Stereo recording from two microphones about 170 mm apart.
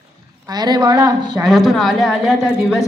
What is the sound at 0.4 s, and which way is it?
A woman's voice, 20° right (ahead or behind).